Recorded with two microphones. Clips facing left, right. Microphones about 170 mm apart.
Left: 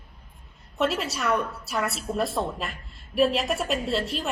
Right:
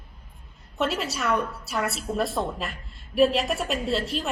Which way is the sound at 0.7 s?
Centre (ahead or behind).